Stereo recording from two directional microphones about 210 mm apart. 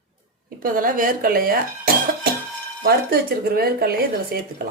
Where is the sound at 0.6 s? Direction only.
40° right (ahead or behind).